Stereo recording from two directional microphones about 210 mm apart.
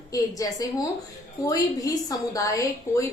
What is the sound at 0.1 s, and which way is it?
A woman's voice, 15° left (ahead or behind).